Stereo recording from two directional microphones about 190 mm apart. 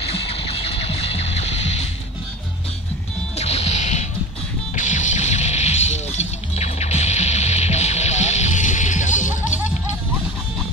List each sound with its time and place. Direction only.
0.1 s music: 30° left (ahead or behind)
3.3 s music: 35° left (ahead or behind)